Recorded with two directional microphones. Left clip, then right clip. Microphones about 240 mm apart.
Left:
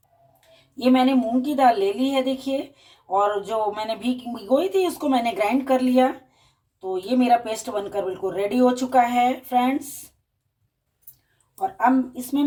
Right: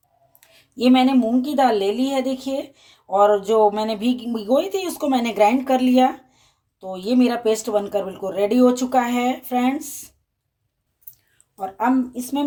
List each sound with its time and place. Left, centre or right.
0.3 s speech: right
12.1 s speech: right